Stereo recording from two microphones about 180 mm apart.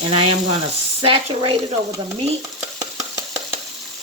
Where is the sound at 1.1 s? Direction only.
30° right (ahead or behind).